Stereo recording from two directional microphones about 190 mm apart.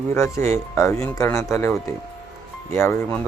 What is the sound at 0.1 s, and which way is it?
Speech, 15° left (ahead or behind).